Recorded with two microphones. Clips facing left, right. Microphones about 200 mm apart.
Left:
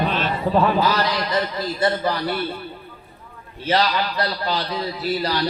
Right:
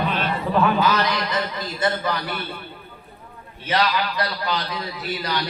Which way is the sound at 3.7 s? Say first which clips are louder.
Left 2 dB; 35° left (ahead or behind).